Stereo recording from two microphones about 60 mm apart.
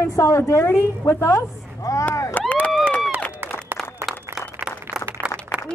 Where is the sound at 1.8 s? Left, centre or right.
Left.